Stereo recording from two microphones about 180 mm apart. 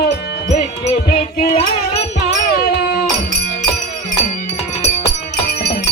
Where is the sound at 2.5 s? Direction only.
60° left (ahead or behind).